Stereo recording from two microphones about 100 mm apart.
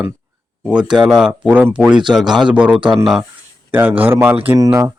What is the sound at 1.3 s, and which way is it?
Speech, 15° right (ahead or behind).